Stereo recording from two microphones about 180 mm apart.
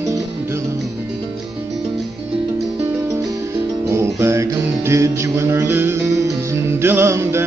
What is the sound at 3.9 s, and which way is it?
Music, 15° right (ahead or behind).